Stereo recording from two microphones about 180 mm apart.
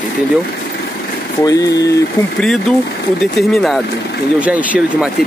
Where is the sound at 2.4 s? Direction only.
Centre (ahead or behind).